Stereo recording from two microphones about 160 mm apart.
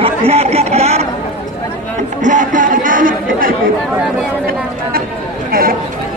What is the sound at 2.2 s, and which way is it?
Chatter, 55° right (ahead or behind).